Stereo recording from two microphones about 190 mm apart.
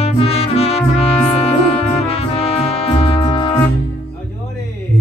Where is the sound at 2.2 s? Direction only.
30° left (ahead or behind).